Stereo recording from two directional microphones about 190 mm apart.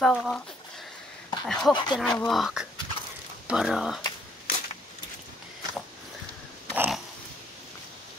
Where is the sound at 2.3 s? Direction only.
Centre (ahead or behind).